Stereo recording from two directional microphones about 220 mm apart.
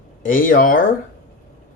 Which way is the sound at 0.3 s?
40° left (ahead or behind).